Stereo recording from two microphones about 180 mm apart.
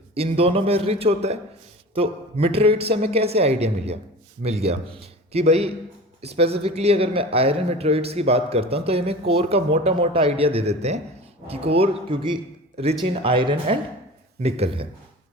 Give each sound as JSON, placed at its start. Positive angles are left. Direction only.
{"t": 0.1, "sound": "a man's voice", "side_deg": -30}